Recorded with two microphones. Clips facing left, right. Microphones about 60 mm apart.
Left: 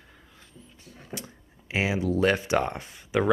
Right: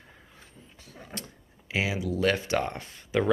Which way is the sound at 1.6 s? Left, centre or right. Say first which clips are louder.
Left 3 dB; left.